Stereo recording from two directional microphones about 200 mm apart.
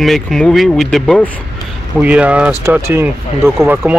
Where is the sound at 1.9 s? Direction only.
5° right (ahead or behind).